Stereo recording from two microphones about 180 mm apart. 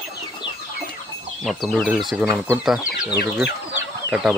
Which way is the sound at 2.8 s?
65° left (ahead or behind).